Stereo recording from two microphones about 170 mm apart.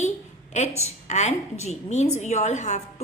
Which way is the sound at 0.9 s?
40° left (ahead or behind).